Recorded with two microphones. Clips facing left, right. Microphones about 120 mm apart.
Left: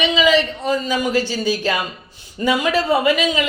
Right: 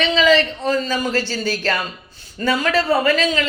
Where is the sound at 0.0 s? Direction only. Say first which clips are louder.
Even; 10° left (ahead or behind).